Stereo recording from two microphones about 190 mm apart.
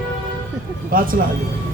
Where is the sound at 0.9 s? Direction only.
45° right (ahead or behind).